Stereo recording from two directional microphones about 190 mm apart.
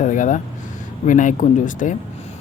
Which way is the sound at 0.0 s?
40° left (ahead or behind).